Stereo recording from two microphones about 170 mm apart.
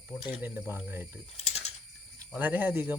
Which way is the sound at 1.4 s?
40° left (ahead or behind).